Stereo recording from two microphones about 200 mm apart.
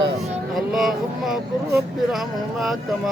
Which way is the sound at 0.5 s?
Centre (ahead or behind).